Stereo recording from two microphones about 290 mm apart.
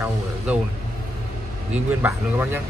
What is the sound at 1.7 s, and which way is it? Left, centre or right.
Speech, centre.